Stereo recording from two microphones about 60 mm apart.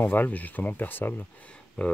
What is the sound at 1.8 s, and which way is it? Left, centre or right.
Speech, centre.